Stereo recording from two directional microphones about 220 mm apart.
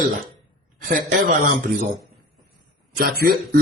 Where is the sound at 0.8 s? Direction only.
40° right (ahead or behind).